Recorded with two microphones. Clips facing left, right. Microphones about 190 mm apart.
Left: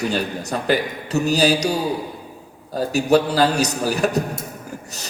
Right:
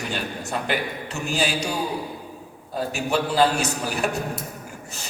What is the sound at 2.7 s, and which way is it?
A man's voice, 40° left (ahead or behind).